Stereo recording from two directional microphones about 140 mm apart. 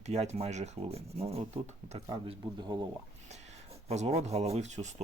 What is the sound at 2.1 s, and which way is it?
Speech, 30° right (ahead or behind).